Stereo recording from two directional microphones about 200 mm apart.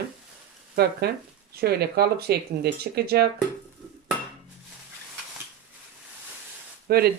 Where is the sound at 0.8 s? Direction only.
50° right (ahead or behind).